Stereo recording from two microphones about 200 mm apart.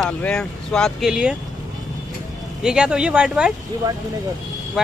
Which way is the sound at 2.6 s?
5° right (ahead or behind).